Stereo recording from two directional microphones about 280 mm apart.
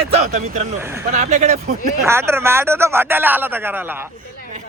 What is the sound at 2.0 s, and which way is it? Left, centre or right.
Speech, centre.